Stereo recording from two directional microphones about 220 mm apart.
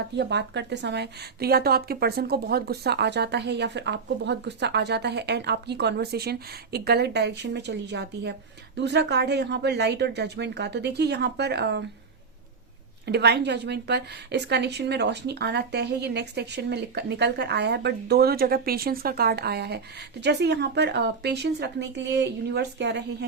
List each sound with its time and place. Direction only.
0.2 s a woman's voice: 50° right (ahead or behind)
13.1 s a woman's voice: 50° right (ahead or behind)